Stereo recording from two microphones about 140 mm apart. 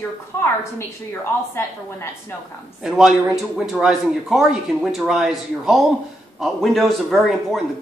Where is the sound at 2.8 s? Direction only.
5° right (ahead or behind).